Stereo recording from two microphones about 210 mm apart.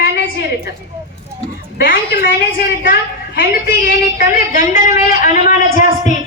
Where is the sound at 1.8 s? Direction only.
45° left (ahead or behind).